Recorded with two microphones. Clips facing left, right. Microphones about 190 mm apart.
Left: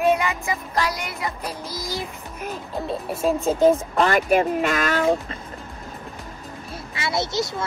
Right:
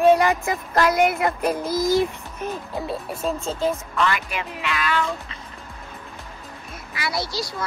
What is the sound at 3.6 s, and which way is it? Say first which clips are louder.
Speech: left 5 dB; 45° left (ahead or behind).